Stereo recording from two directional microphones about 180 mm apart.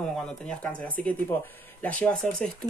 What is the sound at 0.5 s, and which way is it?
Speech, 5° left (ahead or behind).